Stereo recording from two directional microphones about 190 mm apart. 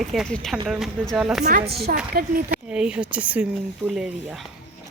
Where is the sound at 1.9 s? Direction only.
50° right (ahead or behind).